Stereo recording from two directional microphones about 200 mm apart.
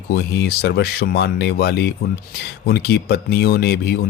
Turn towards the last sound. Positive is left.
turn(degrees=55)  # may be behind; listen again after turning